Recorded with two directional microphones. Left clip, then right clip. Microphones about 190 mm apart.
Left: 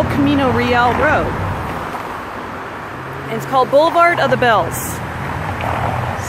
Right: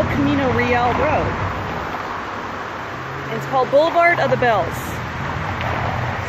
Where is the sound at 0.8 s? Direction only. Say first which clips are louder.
Left 4 dB; 50° left (ahead or behind).